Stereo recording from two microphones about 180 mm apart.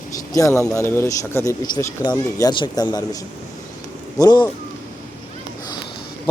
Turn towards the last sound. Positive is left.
turn(degrees=20)  # may be behind; listen again after turning